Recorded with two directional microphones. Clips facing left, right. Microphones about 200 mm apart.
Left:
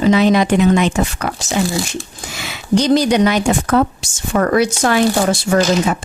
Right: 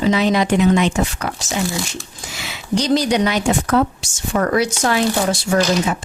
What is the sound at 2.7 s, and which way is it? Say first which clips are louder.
Speech: left 4 dB; 55° left (ahead or behind).